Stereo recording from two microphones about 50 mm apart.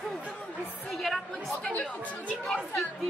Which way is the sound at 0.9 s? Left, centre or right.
Centre.